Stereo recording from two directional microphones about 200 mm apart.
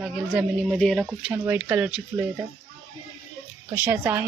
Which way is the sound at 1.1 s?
10° right (ahead or behind).